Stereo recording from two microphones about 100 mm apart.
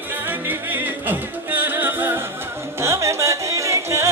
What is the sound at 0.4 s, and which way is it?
Music, 20° right (ahead or behind).